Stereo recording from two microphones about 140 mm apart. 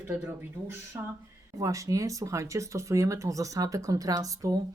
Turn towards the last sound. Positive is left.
turn(degrees=-25)  # may be behind; listen again after turning